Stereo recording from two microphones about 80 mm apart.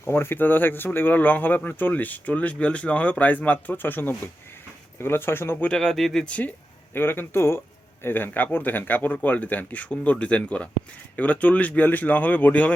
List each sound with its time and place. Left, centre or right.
0.0 s speech: left
5.6 s speech: centre
6.9 s speech: left